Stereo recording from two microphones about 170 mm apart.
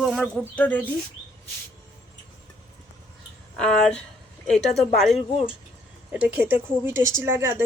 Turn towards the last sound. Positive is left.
turn(degrees=-15)  # may be behind; listen again after turning